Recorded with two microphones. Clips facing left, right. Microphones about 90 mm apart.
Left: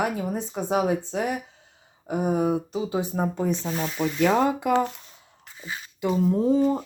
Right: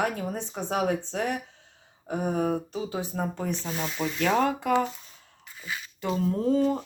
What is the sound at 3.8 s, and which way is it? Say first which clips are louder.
Speech: left 3 dB; 5° left (ahead or behind).